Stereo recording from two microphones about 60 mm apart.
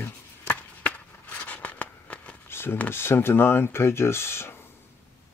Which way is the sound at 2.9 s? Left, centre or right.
Left.